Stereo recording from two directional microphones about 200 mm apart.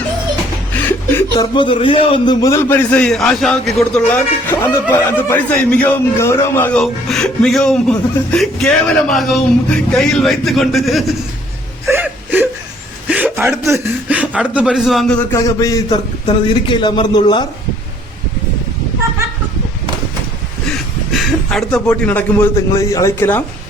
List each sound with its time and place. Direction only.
0.7 s chuckle: 10° left (ahead or behind)
1.4 s a man's voice: 25° left (ahead or behind); by 11.0 s centre (ahead or behind)
11.9 s wail: 10° right (ahead or behind)
13.1 s a sound: 10° right (ahead or behind)
13.6 s speech: 15° right (ahead or behind)
15.3 s a man's voice: 15° left (ahead or behind)
20.7 s speech: centre (ahead or behind)